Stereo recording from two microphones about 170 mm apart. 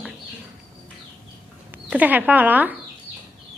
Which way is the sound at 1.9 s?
10° right (ahead or behind).